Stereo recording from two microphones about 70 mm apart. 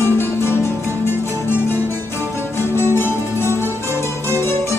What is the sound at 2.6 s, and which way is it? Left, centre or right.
Music, left.